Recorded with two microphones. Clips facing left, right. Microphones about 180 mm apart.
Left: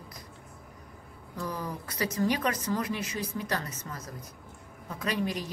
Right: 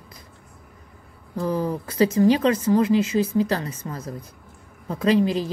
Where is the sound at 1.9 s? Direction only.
25° right (ahead or behind).